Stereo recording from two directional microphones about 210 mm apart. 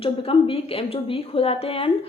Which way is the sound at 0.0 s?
25° left (ahead or behind).